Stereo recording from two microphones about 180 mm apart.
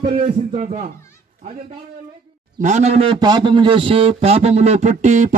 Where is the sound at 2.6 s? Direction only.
40° right (ahead or behind).